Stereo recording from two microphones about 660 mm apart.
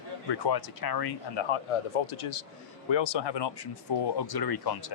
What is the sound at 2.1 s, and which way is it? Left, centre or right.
Speech, left.